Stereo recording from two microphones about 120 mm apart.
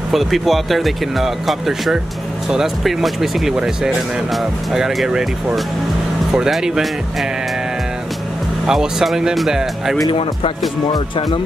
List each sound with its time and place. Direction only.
0.1 s speech: centre (ahead or behind)
8.6 s speech: 5° right (ahead or behind)
10.9 s speech: 35° left (ahead or behind)